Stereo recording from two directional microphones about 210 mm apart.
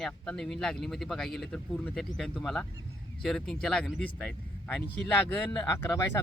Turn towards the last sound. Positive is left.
turn(degrees=10)  # may be behind; listen again after turning